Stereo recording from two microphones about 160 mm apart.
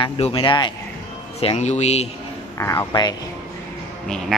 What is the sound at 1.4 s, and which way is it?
Speech, 40° left (ahead or behind).